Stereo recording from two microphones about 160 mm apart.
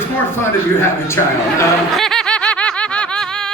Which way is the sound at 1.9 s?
Centre (ahead or behind).